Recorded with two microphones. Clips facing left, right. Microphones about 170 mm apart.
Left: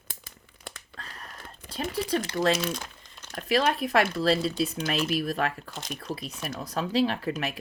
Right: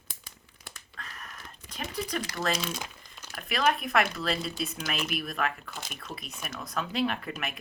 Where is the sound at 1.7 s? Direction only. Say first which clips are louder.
Left 6 dB; 30° left (ahead or behind).